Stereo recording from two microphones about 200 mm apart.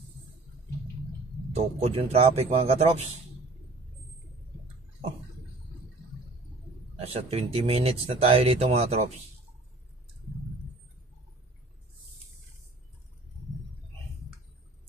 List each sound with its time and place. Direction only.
1.5 s a man's voice: 30° right (ahead or behind)
7.0 s speech: 30° right (ahead or behind)